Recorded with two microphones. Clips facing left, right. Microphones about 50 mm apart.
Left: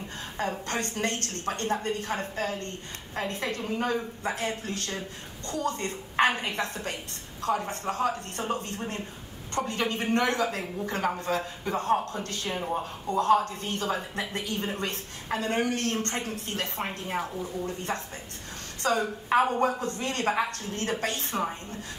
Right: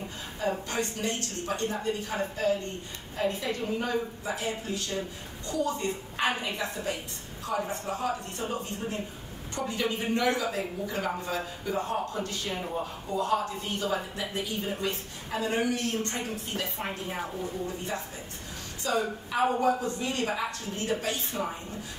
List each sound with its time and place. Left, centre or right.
0.4 s speech: left
18.8 s speech: left